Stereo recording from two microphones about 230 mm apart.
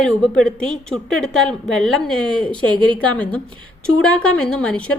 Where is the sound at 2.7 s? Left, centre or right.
Right.